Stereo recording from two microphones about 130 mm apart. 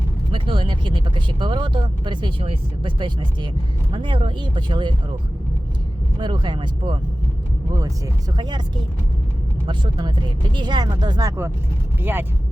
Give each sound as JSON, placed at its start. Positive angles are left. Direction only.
{"t": 0.3, "sound": "speech", "side_deg": -40}
{"t": 6.1, "sound": "speech", "side_deg": -40}
{"t": 7.7, "sound": "speech", "side_deg": -25}
{"t": 9.6, "sound": "speech", "side_deg": -35}